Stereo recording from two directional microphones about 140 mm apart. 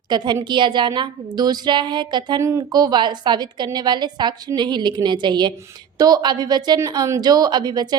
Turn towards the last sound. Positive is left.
turn(degrees=-30)  # may be behind; listen again after turning